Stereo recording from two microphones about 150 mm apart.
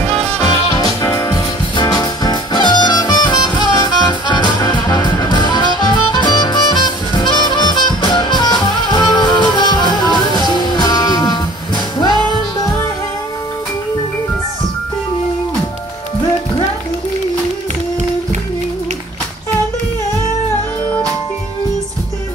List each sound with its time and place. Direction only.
1.0 s music: 15° left (ahead or behind)